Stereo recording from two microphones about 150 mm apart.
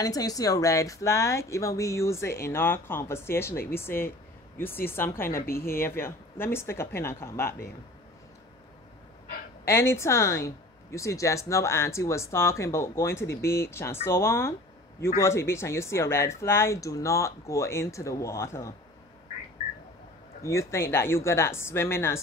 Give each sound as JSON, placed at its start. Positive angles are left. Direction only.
{"t": 0.0, "sound": "speech", "side_deg": 25}
{"t": 5.3, "sound": "speech", "side_deg": 80}
{"t": 5.8, "sound": "speech", "side_deg": 15}
{"t": 9.7, "sound": "speech", "side_deg": 15}
{"t": 20.4, "sound": "speech", "side_deg": 20}